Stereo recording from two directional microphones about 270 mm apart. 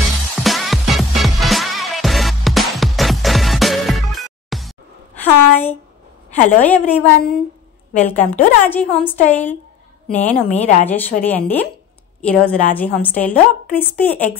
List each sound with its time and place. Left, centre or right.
0.0 s music: centre
5.2 s a sound: centre
6.6 s a woman's voice: centre
10.5 s speech: left
10.9 s a woman's voice: centre